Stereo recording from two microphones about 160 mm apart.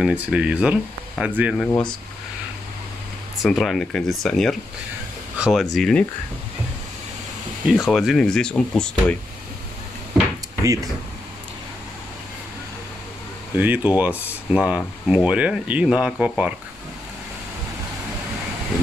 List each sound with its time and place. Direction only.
0.0 s speech: 5° right (ahead or behind)
3.4 s speech: centre (ahead or behind)
7.6 s speech: centre (ahead or behind)
10.6 s speech: 20° right (ahead or behind)
13.6 s speech: 10° right (ahead or behind)